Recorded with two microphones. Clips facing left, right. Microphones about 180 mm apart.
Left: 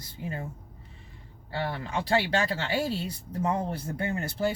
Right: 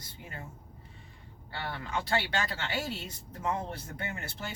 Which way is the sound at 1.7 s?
30° left (ahead or behind).